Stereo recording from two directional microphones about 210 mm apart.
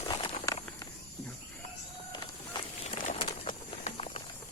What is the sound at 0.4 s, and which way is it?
Walk, 15° left (ahead or behind).